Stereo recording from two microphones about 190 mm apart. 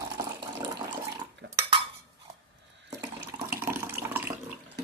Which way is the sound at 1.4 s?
70° right (ahead or behind).